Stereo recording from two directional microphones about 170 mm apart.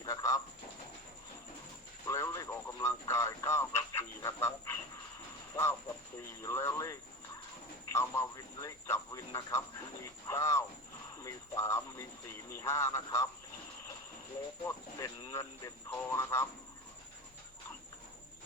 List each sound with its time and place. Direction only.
0.0 s bird: 20° left (ahead or behind)
2.0 s a man's voice: 20° left (ahead or behind)
7.9 s a man's voice: 15° left (ahead or behind)
14.6 s a man's voice: 20° left (ahead or behind)